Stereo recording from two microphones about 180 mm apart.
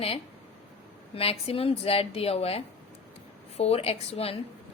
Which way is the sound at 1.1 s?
35° left (ahead or behind).